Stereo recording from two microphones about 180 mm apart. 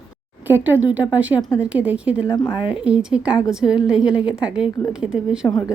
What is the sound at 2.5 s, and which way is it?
A woman's voice, 5° right (ahead or behind).